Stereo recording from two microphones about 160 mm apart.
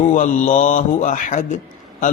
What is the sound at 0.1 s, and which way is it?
Speech, 55° left (ahead or behind).